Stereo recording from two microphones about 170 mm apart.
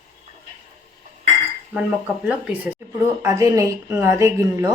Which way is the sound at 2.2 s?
15° right (ahead or behind).